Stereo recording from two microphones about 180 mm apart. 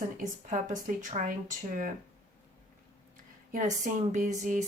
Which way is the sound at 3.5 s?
45° right (ahead or behind).